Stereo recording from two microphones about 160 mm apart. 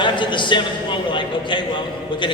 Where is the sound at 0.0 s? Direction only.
30° left (ahead or behind).